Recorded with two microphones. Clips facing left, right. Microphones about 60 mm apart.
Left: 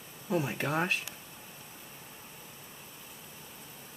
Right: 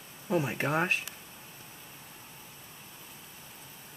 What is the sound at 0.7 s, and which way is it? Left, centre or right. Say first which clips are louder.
Speech: right 1 dB; right.